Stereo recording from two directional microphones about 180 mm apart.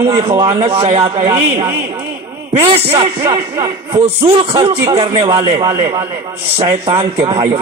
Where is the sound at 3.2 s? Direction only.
15° right (ahead or behind).